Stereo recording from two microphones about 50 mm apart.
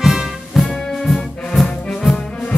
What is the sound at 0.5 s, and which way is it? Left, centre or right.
Music, centre.